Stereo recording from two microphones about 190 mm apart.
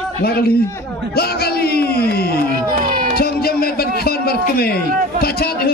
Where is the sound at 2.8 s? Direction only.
45° right (ahead or behind).